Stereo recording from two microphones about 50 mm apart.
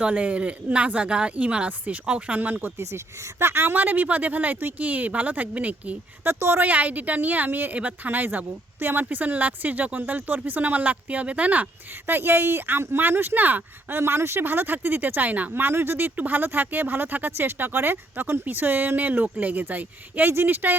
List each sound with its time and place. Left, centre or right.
0.0 s speech: right
2.8 s speech: right
6.2 s speech: right
6.7 s speech: right
12.0 s speech: right
14.0 s speech: right
15.7 s speech: right